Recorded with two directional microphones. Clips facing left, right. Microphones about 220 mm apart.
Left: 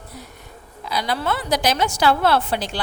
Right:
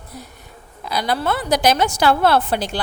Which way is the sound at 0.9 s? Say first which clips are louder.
Right 2 dB; 50° right (ahead or behind).